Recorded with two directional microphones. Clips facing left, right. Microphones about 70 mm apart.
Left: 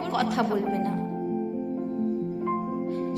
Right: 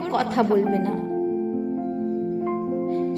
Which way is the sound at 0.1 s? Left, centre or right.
Right.